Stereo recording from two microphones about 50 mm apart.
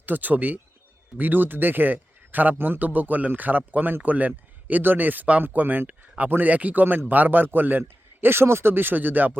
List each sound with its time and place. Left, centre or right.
0.0 s a man's voice: right